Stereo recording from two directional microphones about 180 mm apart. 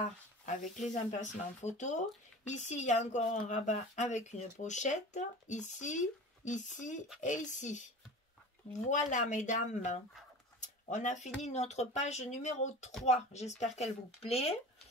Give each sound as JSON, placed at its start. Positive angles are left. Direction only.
{"t": 0.7, "sound": "speech", "side_deg": 45}